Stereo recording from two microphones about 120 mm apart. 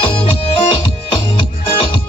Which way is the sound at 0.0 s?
45° left (ahead or behind).